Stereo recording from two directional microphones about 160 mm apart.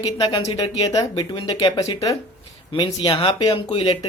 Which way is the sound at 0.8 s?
25° left (ahead or behind).